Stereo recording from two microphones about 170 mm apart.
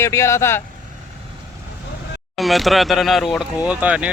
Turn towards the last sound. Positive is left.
turn(degrees=-10)  # may be behind; listen again after turning